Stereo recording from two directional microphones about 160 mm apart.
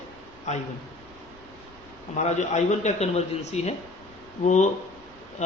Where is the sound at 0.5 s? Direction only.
50° left (ahead or behind).